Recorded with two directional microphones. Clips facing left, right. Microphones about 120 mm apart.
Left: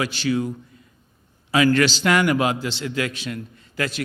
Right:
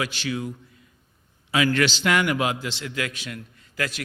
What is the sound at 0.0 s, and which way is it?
A man's voice, 35° left (ahead or behind).